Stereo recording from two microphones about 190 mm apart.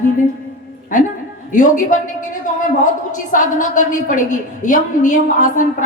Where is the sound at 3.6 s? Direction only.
45° left (ahead or behind).